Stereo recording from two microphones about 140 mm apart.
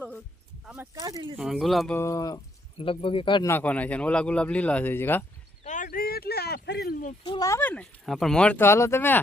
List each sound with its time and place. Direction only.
0.6 s speech: 5° right (ahead or behind)
0.9 s speech: 25° right (ahead or behind)
1.4 s speech: centre (ahead or behind)
1.9 s speech: 20° left (ahead or behind)
2.7 s speech: 40° left (ahead or behind)
3.4 s speech: 15° left (ahead or behind)
5.6 s a sound: 65° left (ahead or behind); by 6.2 s 90° left
6.8 s speech: 90° left
7.3 s speech: 25° left (ahead or behind)
7.6 s speech: 10° left (ahead or behind)